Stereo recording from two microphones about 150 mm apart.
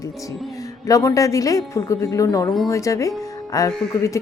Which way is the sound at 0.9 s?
20° left (ahead or behind).